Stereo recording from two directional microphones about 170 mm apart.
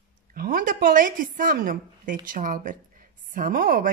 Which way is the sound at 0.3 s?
55° right (ahead or behind).